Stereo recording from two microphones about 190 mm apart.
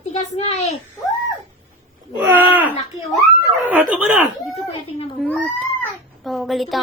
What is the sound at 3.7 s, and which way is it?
Speech, 10° right (ahead or behind).